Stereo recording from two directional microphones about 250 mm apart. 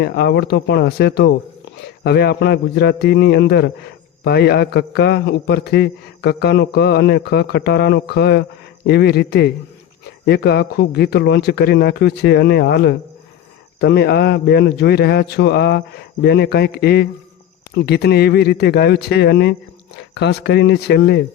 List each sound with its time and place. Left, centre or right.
0.0 s a man's voice: left